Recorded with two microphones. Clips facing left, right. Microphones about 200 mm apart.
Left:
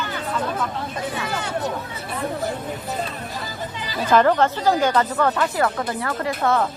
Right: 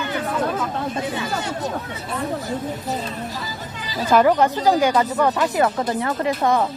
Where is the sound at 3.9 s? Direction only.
10° right (ahead or behind).